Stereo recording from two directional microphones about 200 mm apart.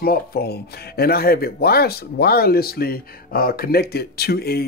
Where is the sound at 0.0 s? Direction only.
50° left (ahead or behind).